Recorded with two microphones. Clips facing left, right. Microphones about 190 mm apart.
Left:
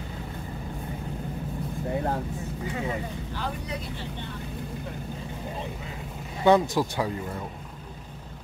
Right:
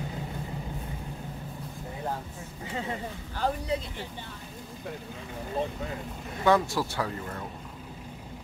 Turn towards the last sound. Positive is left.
turn(degrees=15)  # may be behind; listen again after turning